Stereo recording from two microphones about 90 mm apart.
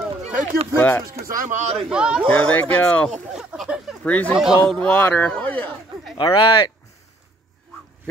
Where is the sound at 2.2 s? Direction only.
15° left (ahead or behind).